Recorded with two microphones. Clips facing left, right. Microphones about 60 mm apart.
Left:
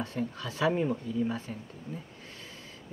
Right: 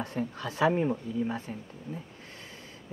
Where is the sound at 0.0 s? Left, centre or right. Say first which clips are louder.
Right 1 dB; right.